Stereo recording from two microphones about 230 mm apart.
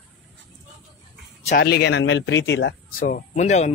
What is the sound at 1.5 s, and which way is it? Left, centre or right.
Speech, left.